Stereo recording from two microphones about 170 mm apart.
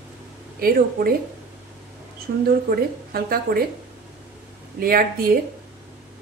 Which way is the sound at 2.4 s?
60° right (ahead or behind).